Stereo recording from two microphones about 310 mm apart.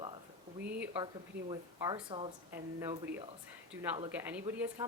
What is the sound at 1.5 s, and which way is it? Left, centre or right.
Speech, centre.